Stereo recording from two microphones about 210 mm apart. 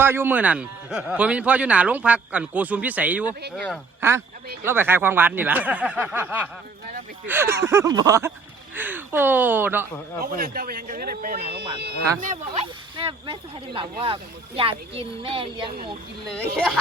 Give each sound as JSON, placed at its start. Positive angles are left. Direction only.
{"t": 0.0, "sound": "speech", "side_deg": -10}
{"t": 4.0, "sound": "speech", "side_deg": -10}
{"t": 10.2, "sound": "speech", "side_deg": -45}
{"t": 13.0, "sound": "speech", "side_deg": -25}
{"t": 16.2, "sound": "speech", "side_deg": 0}